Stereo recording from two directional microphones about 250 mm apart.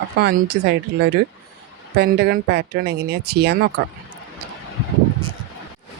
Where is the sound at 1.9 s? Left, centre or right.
Right.